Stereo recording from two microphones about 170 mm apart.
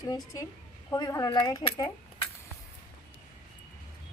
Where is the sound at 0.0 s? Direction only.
20° left (ahead or behind).